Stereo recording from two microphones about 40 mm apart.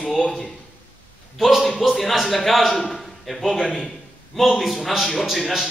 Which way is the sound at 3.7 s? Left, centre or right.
Centre.